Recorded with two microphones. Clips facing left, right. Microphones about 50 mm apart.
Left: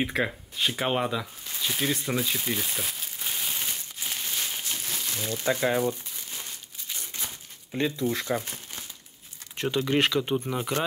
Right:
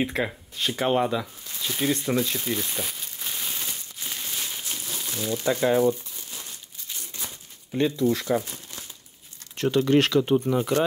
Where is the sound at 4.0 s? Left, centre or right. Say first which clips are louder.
Even; centre.